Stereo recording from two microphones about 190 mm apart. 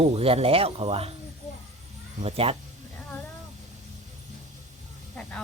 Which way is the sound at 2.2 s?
30° right (ahead or behind).